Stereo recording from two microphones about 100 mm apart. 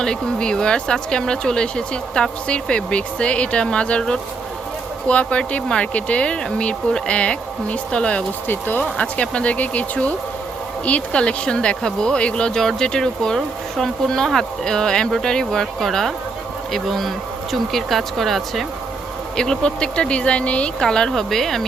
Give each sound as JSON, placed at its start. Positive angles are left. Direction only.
{"t": 0.0, "sound": "speech", "side_deg": 10}